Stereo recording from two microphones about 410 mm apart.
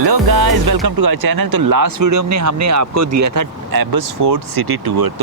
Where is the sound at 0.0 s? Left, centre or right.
Right.